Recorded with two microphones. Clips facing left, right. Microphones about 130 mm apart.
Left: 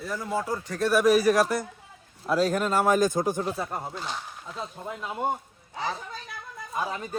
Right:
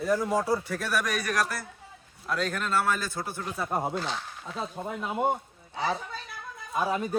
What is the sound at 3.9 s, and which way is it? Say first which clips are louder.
A man's voice: right 3 dB; centre (ahead or behind).